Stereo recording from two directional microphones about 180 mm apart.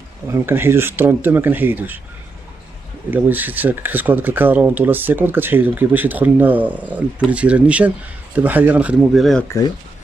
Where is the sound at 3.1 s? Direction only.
10° right (ahead or behind).